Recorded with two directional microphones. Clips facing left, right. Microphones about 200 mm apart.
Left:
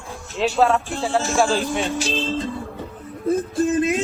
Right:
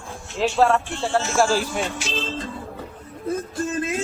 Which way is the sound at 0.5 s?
Centre (ahead or behind).